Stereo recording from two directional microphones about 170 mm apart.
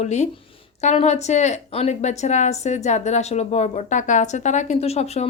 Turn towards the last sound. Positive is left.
turn(degrees=40)  # may be behind; listen again after turning